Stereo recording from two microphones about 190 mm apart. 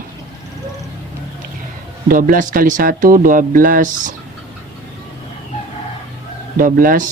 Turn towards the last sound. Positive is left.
turn(degrees=-45)  # may be behind; listen again after turning